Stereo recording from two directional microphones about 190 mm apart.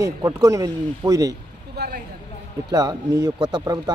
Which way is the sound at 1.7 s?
55° right (ahead or behind).